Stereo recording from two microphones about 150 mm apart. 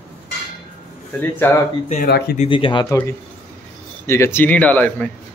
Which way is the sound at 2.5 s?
35° left (ahead or behind).